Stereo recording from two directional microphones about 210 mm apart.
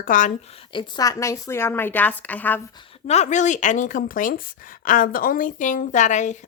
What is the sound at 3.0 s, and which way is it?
A woman's voice, 35° left (ahead or behind).